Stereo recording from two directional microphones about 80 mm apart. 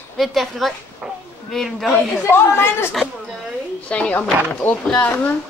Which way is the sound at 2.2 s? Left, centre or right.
Left.